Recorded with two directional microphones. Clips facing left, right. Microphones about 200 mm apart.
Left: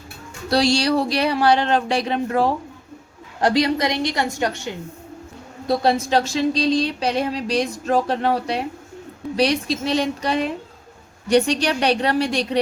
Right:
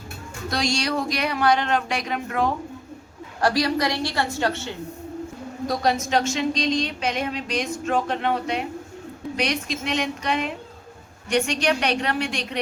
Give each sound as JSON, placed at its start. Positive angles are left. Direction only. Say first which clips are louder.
{"t": 0.5, "sound": "a woman's voice", "louder": "left 7 dB", "side_deg": 35}
{"t": 5.6, "sound": "speech", "louder": "left 4 dB", "side_deg": 30}